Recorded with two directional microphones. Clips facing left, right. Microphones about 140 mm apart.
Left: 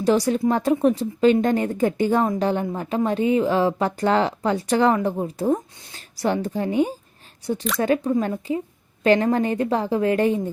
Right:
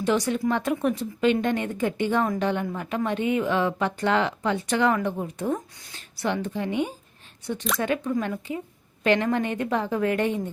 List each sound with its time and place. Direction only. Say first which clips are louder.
0.0 s speech: left 4 dB; 35° left (ahead or behind)